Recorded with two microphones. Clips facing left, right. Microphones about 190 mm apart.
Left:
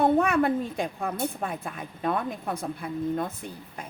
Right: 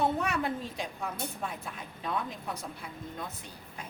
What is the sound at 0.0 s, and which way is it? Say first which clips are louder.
Speech: left 8 dB; 55° left (ahead or behind).